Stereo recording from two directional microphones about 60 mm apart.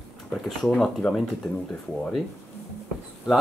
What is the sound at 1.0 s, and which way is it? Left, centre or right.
Speech, left.